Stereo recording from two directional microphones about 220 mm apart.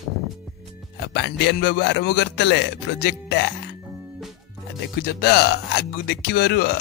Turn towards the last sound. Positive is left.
turn(degrees=45)  # may be behind; listen again after turning